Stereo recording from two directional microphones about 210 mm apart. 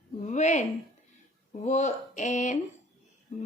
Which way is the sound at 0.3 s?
35° left (ahead or behind).